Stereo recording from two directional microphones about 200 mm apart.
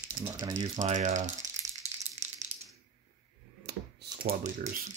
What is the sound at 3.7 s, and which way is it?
Computer keyboard, 55° right (ahead or behind).